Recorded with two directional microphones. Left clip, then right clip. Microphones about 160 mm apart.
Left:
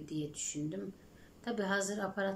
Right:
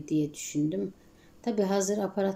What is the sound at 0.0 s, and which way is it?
A woman's voice, 15° right (ahead or behind).